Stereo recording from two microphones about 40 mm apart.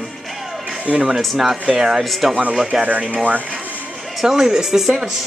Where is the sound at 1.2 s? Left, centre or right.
Centre.